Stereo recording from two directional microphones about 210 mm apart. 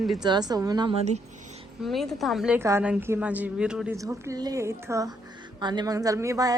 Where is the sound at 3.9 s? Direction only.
15° right (ahead or behind).